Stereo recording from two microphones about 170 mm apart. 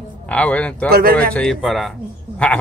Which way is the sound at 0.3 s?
5° left (ahead or behind).